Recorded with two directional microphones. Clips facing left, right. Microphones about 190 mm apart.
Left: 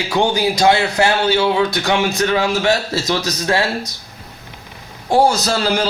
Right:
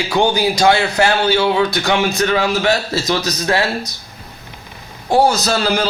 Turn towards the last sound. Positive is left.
turn(degrees=30)  # may be behind; listen again after turning